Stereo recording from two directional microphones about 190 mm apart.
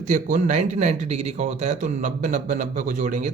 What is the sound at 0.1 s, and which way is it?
Speech, 40° right (ahead or behind).